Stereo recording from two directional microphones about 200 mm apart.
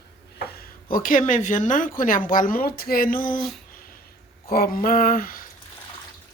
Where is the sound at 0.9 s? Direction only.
45° left (ahead or behind).